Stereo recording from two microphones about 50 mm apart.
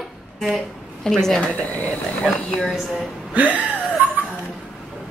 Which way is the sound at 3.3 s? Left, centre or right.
Right.